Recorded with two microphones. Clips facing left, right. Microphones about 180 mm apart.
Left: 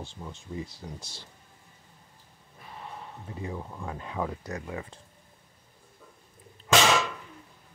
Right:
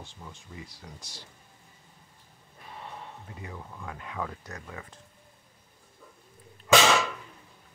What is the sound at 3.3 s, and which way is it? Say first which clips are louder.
Speech: left 9 dB; 30° left (ahead or behind).